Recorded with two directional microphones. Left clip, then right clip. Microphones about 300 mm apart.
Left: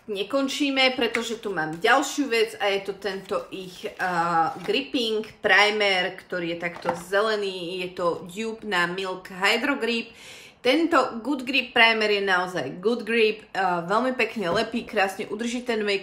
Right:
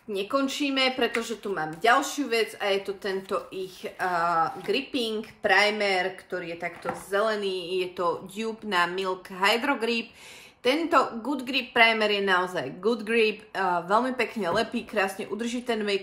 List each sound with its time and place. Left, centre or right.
0.1 s speech: centre